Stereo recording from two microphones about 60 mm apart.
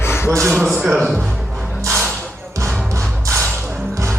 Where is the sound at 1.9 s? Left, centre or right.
Centre.